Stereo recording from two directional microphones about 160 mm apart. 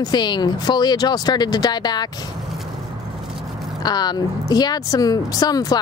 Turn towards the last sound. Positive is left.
turn(degrees=25)  # may be behind; listen again after turning